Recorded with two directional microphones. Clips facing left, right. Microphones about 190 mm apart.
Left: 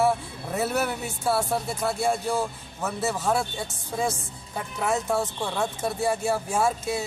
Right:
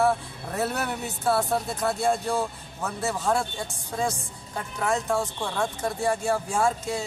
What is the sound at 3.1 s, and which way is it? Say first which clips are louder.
Speech: right 1 dB; 5° left (ahead or behind).